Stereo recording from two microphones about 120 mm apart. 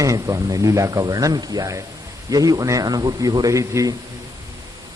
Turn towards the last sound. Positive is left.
turn(degrees=-25)  # may be behind; listen again after turning